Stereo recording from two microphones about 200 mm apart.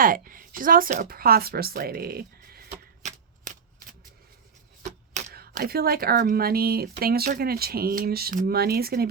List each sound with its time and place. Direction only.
0.0 s speech: 45° right (ahead or behind)
3.0 s shuffling cards: 40° right (ahead or behind)
5.3 s speech: 50° right (ahead or behind)